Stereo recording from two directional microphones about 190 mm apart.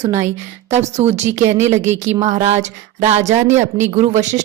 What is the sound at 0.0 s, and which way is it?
Speech, 40° right (ahead or behind).